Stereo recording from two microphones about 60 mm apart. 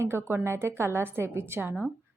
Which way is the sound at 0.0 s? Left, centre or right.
Right.